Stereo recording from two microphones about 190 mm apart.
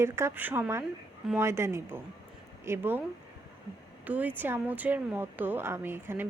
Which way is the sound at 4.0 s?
10° right (ahead or behind).